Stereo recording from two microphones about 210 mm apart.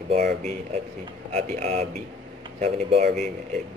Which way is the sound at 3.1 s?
Centre (ahead or behind).